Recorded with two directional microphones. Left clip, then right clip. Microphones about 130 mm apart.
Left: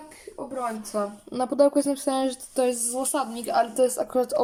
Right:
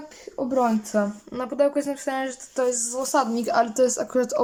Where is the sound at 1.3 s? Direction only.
20° left (ahead or behind).